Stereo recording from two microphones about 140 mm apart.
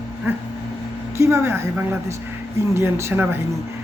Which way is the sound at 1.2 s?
20° right (ahead or behind).